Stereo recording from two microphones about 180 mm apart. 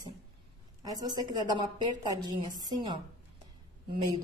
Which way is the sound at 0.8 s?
20° right (ahead or behind).